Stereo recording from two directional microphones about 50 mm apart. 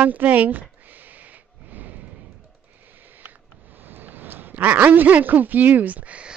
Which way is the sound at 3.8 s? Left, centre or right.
Right.